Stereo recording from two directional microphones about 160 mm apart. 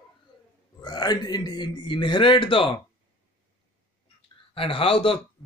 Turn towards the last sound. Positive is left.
turn(degrees=35)  # may be behind; listen again after turning